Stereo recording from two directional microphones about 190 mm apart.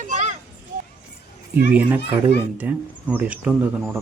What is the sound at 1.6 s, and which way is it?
Speech, 10° right (ahead or behind).